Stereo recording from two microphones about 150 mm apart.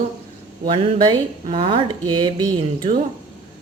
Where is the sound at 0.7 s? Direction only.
35° right (ahead or behind).